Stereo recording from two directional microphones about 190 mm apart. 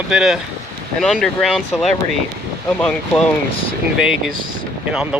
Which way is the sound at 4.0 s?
5° right (ahead or behind).